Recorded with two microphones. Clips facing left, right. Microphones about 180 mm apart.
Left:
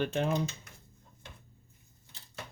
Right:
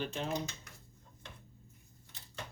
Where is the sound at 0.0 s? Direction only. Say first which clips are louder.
Left 7 dB; 60° left (ahead or behind).